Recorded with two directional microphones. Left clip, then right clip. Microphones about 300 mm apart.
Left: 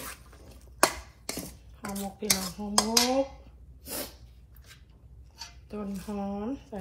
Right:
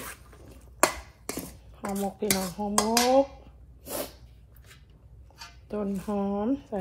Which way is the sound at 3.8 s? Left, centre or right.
Centre.